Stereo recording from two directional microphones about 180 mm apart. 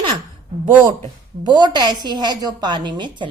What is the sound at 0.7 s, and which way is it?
Speech, 10° right (ahead or behind).